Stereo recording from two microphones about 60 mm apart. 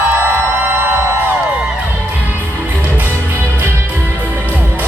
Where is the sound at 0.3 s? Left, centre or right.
Right.